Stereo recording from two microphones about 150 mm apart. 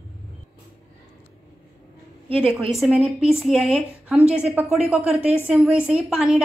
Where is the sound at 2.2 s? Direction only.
40° right (ahead or behind).